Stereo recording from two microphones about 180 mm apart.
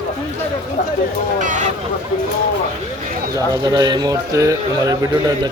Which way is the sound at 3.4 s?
20° right (ahead or behind).